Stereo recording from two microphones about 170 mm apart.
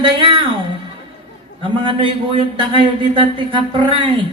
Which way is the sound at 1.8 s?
30° right (ahead or behind).